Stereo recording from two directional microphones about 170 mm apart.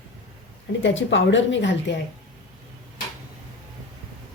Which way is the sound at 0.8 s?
90° left.